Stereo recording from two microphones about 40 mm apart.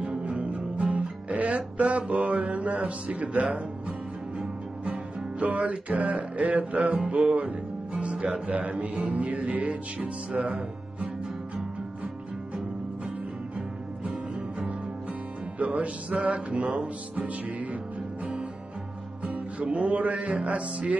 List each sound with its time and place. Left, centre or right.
0.1 s music: right
5.4 s music: right
15.6 s music: right
19.2 s music: right